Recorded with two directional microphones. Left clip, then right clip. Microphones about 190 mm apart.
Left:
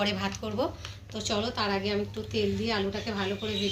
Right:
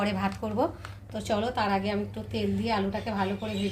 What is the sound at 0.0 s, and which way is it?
A woman's voice, 50° right (ahead or behind).